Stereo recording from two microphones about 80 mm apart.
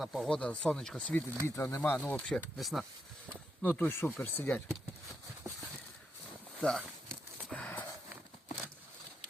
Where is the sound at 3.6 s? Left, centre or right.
Left.